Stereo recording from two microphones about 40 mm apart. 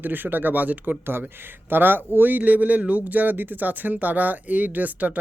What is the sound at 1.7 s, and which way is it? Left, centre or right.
Speech, right.